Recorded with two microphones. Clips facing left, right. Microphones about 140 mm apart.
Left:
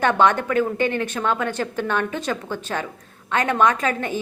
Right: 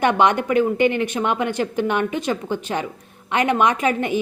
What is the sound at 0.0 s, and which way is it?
A woman's voice, 15° right (ahead or behind).